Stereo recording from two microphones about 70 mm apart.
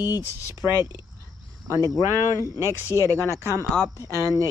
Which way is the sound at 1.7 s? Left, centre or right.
Right.